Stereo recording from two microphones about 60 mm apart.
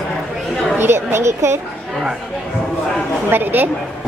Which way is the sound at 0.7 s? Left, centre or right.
Right.